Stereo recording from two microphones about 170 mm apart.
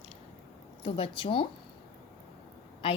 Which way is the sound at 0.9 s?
30° left (ahead or behind).